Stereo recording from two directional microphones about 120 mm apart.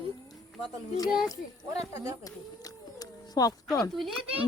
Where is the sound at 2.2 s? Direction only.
30° left (ahead or behind).